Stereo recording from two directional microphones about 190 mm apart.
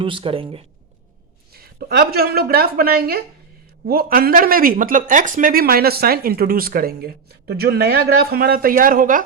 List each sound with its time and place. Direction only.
0.0 s speech: 25° right (ahead or behind)
1.5 s speech: 55° right (ahead or behind)